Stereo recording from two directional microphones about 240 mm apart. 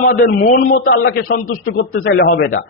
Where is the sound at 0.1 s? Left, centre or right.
Left.